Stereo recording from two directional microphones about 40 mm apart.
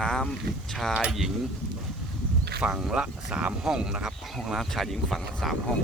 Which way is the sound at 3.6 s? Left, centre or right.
Centre.